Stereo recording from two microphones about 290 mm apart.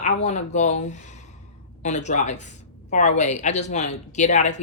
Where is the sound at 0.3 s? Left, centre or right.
Left.